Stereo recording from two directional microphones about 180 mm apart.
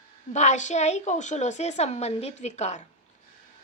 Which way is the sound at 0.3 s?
40° left (ahead or behind).